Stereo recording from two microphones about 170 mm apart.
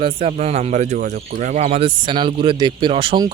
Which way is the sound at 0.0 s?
35° right (ahead or behind).